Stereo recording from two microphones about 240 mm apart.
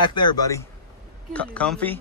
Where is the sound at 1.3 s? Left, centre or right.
Centre.